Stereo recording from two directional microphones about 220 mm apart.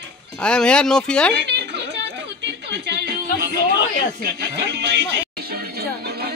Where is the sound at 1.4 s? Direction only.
50° right (ahead or behind).